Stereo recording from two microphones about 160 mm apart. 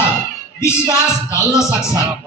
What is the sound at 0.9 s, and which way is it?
Speech, 20° left (ahead or behind).